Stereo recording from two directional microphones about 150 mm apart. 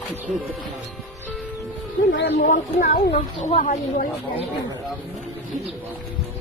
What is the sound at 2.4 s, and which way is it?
Speech, 70° left (ahead or behind).